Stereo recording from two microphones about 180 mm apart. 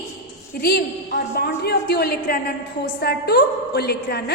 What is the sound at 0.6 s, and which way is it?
A woman's voice, 60° left (ahead or behind).